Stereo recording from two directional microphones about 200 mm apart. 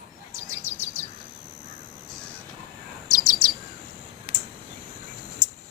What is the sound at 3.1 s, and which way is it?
Chirp, 45° right (ahead or behind).